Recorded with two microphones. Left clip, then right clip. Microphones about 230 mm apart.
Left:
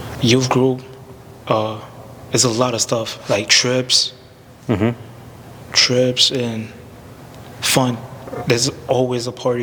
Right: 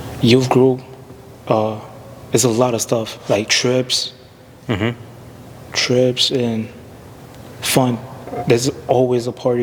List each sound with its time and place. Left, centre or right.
0.2 s a man's voice: left
4.6 s speech: right
5.7 s a man's voice: left